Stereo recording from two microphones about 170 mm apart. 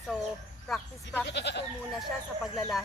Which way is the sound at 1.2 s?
90° left.